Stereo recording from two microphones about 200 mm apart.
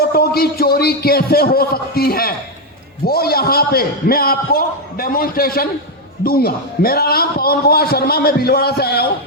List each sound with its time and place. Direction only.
0.1 s a man's voice: 50° left (ahead or behind)